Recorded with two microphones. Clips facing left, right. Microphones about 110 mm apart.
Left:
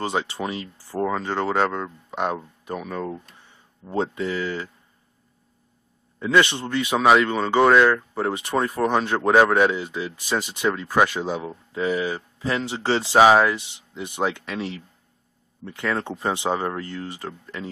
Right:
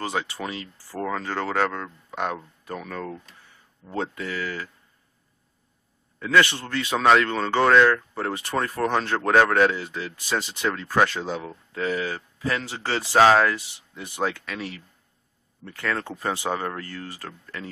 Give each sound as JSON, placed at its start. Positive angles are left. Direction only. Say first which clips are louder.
{"t": 0.0, "sound": "speech", "louder": "left 3 dB", "side_deg": 25}
{"t": 6.1, "sound": "speech", "louder": "left 1 dB", "side_deg": 20}
{"t": 13.2, "sound": "speech", "louder": "left 1 dB", "side_deg": 15}